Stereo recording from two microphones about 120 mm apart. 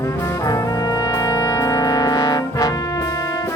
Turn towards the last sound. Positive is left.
turn(degrees=30)  # may be behind; listen again after turning